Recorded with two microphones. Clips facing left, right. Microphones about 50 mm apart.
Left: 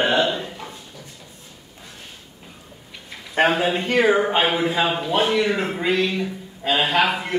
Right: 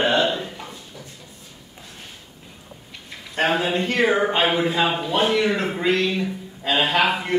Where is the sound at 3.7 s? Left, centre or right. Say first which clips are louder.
Left 2 dB; centre.